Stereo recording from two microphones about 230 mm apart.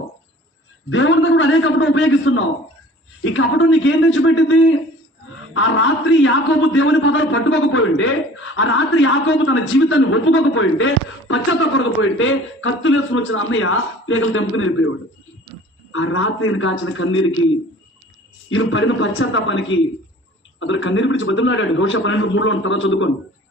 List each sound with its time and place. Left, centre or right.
0.9 s a man's voice: left
15.9 s a man's voice: left
18.4 s a man's voice: left